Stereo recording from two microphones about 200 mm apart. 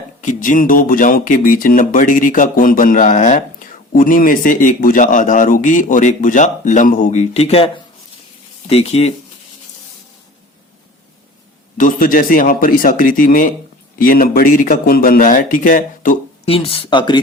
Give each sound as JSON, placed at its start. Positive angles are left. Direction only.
{"t": 0.2, "sound": "speech", "side_deg": 40}
{"t": 11.8, "sound": "speech", "side_deg": 40}
{"t": 16.6, "sound": "speech", "side_deg": 30}